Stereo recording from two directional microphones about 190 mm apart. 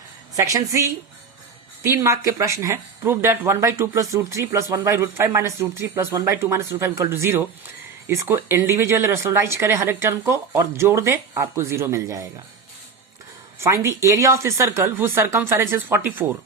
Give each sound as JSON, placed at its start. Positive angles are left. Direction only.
{"t": 0.3, "sound": "speech", "side_deg": -15}
{"t": 13.6, "sound": "speech", "side_deg": -15}